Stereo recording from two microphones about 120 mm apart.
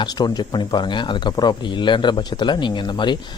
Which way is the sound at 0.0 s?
35° left (ahead or behind).